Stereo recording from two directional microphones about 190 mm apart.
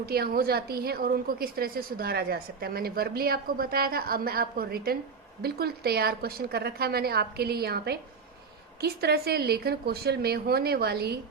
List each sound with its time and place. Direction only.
0.0 s a woman's voice: 55° right (ahead or behind)